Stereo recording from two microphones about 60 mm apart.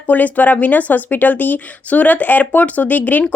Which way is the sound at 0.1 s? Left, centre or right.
Left.